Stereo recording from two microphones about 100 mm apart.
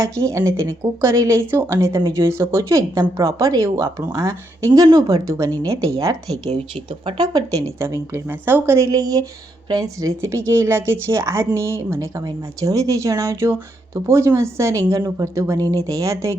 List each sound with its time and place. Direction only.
0.0 s a woman's voice: 30° right (ahead or behind)
7.8 s a woman's voice: 25° right (ahead or behind)